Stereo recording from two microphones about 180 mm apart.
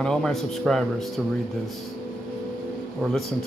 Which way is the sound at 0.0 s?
5° left (ahead or behind).